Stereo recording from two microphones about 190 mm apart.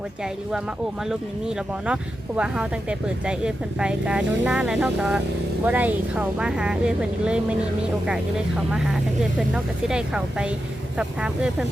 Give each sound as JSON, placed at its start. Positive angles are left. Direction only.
{"t": 1.0, "sound": "speech", "side_deg": -5}
{"t": 8.7, "sound": "speech", "side_deg": -5}